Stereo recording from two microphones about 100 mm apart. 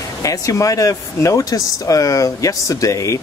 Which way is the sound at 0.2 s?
35° left (ahead or behind).